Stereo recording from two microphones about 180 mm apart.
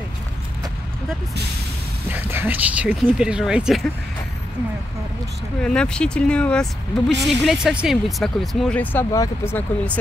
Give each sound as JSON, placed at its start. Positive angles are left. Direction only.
{"t": 2.0, "sound": "speech", "side_deg": -10}
{"t": 5.6, "sound": "speech", "side_deg": 5}